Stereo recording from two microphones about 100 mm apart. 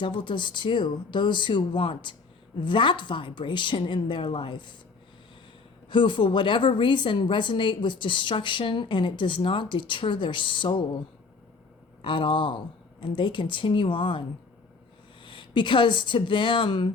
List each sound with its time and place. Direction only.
0.0 s a woman's voice: 55° left (ahead or behind)
5.9 s a woman's voice: 55° left (ahead or behind)
12.0 s speech: 55° left (ahead or behind)